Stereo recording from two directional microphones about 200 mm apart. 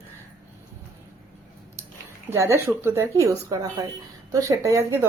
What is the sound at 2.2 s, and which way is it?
Speech, 15° right (ahead or behind).